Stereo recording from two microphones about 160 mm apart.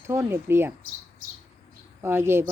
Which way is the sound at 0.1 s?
15° right (ahead or behind).